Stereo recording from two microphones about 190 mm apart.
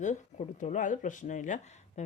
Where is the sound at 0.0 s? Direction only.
40° left (ahead or behind).